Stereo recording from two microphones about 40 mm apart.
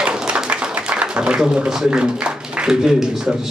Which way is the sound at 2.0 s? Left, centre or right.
Right.